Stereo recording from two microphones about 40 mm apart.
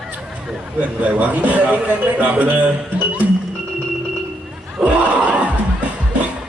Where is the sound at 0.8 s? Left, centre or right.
Right.